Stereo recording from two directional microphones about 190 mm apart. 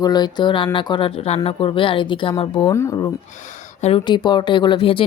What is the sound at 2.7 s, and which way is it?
Speech, 15° left (ahead or behind).